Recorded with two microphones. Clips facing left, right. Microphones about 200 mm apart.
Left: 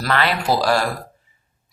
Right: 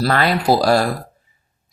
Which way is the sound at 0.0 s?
40° right (ahead or behind).